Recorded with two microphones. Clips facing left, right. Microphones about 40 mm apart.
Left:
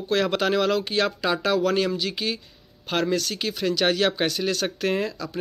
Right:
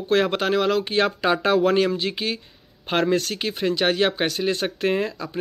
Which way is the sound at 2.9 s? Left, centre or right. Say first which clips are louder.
Right 3 dB; right.